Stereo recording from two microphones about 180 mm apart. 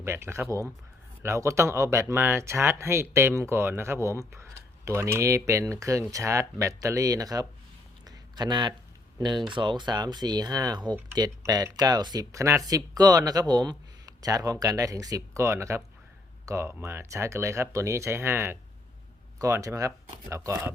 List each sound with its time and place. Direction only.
0.0 s speech: 15° right (ahead or behind)
8.0 s a sound: 25° right (ahead or behind)
9.1 s speech: 25° right (ahead or behind)